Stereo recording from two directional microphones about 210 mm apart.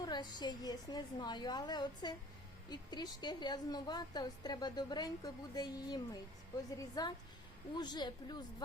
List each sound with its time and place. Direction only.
0.0 s a woman's voice: 20° left (ahead or behind)